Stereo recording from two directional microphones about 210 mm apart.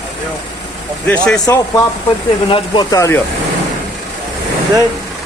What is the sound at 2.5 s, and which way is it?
Speech, 20° left (ahead or behind).